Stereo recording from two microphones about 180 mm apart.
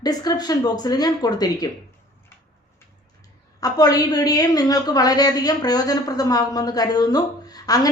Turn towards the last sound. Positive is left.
turn(degrees=20)  # may be behind; listen again after turning